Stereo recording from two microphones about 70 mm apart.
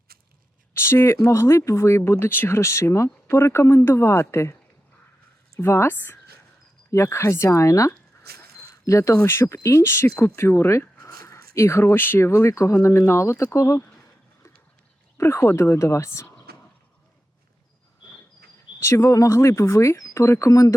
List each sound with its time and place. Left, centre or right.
0.7 s speech: left
5.5 s speech: left
8.4 s a sound: left
9.2 s speech: left
15.2 s speech: left
18.8 s speech: left